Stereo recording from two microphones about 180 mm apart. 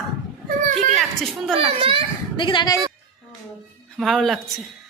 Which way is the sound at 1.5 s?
30° right (ahead or behind).